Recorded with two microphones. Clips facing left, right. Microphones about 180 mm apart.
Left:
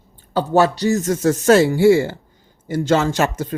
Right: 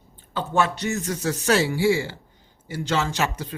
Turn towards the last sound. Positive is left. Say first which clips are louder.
# left 7 dB
turn(degrees=45)  # may be behind; listen again after turning